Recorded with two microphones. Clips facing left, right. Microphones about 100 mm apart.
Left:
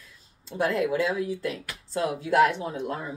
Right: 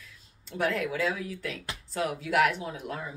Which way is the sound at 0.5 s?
30° left (ahead or behind).